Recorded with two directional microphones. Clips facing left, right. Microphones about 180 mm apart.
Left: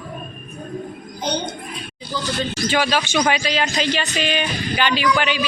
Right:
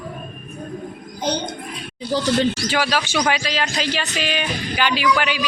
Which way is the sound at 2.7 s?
5° right (ahead or behind).